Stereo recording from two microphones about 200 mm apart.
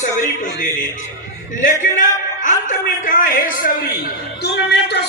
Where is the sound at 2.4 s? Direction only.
40° left (ahead or behind).